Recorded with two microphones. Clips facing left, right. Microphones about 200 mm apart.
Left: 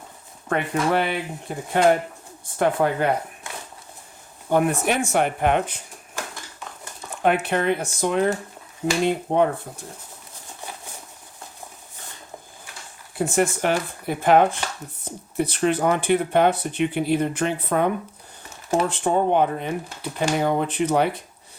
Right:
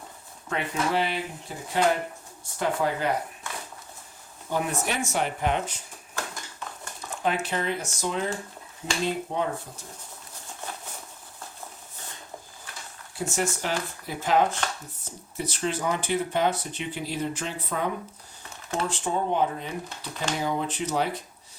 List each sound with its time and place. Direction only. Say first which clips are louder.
0.4 s speech: left 5 dB; 55° left (ahead or behind)
4.4 s speech: left 8 dB; 60° left (ahead or behind)
7.2 s speech: left 7 dB; 60° left (ahead or behind)
13.1 s speech: left 7 dB; 55° left (ahead or behind)